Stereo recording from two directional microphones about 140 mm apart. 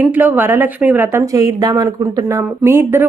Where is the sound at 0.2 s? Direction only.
15° right (ahead or behind).